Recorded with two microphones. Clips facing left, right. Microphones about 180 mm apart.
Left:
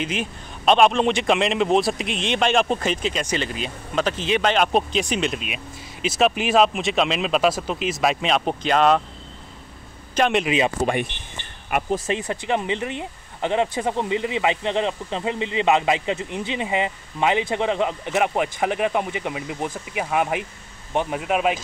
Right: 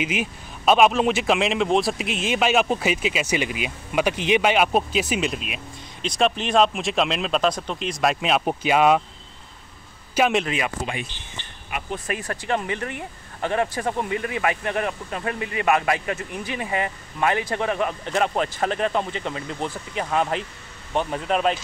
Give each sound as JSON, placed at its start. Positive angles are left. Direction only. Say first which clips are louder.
{"t": 0.0, "sound": "a man's voice", "louder": "right 1 dB", "side_deg": -10}
{"t": 10.1, "sound": "speech", "louder": "even", "side_deg": -5}
{"t": 10.4, "sound": "speech", "louder": "left 6 dB", "side_deg": 20}
{"t": 12.1, "sound": "speech", "louder": "left 2 dB", "side_deg": 20}